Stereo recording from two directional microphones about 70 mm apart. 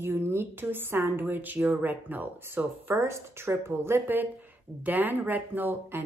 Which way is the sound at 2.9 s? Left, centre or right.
Right.